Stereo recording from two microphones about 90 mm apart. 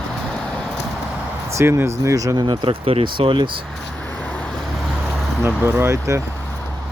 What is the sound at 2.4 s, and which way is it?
Speech, 80° right.